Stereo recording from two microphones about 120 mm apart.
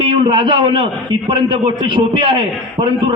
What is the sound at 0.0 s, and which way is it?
A man's voice, 45° right (ahead or behind).